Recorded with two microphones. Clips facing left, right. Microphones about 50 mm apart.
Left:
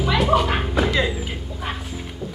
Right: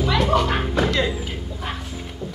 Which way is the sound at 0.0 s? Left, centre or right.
Centre.